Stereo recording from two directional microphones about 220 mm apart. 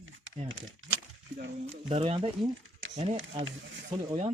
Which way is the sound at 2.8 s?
60° right (ahead or behind).